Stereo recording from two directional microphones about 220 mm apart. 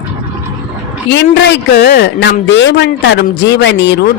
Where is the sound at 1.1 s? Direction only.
55° left (ahead or behind).